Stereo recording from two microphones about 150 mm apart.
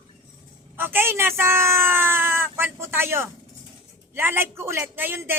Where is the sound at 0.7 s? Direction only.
15° right (ahead or behind).